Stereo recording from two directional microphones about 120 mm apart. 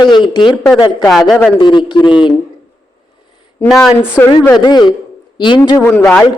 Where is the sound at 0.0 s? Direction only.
40° left (ahead or behind).